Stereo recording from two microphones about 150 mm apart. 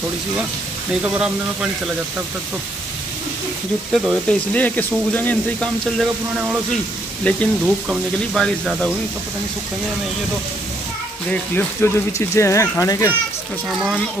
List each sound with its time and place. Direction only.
1.0 s speech: 5° right (ahead or behind)
3.9 s speech: 5° right (ahead or behind)
4.3 s speech: 10° left (ahead or behind)
7.2 s speech: 10° left (ahead or behind)
7.6 s speech: 5° right (ahead or behind)
8.4 s speech: 5° left (ahead or behind)
11.2 s speech: 15° left (ahead or behind)
13.7 s speech: centre (ahead or behind)